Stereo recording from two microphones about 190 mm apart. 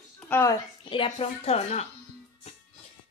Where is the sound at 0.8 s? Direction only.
25° left (ahead or behind).